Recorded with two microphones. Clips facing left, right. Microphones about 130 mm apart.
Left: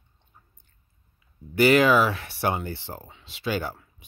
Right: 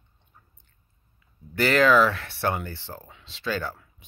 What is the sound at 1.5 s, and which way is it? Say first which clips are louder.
Speech: left 1 dB; 10° left (ahead or behind).